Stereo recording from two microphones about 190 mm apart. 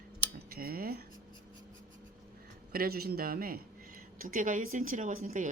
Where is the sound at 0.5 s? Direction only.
50° right (ahead or behind).